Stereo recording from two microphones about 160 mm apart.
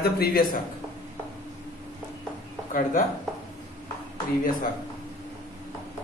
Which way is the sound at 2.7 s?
55° left (ahead or behind).